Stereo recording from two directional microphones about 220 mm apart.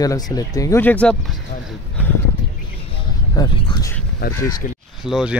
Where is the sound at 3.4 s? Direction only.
15° left (ahead or behind).